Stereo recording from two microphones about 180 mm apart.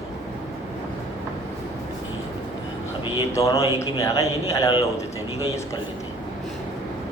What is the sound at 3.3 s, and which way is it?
Speech, 15° left (ahead or behind).